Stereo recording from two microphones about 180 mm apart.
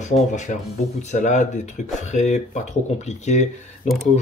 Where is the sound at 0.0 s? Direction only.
40° left (ahead or behind).